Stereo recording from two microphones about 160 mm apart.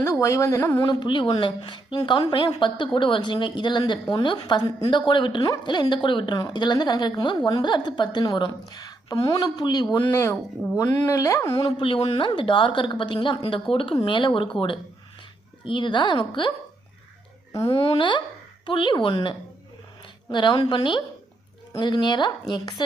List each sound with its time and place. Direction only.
0.0 s a woman's voice: 20° left (ahead or behind)
0.8 s a woman's voice: 30° left (ahead or behind)
15.6 s a woman's voice: 30° left (ahead or behind)
17.7 s a woman's voice: 35° left (ahead or behind)